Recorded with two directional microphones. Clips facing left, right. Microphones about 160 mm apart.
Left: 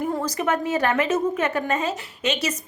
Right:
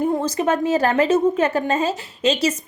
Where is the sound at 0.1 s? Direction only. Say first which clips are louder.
Right 4 dB; 25° right (ahead or behind).